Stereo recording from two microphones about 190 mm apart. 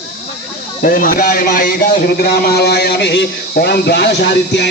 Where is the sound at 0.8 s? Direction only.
45° left (ahead or behind).